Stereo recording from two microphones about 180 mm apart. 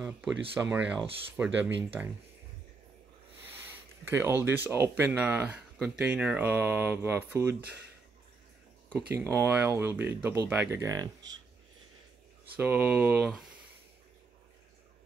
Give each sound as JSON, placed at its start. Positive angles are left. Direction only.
{"t": 0.0, "sound": "speech", "side_deg": -5}
{"t": 4.0, "sound": "speech", "side_deg": -15}
{"t": 8.9, "sound": "speech", "side_deg": -15}
{"t": 12.5, "sound": "speech", "side_deg": -10}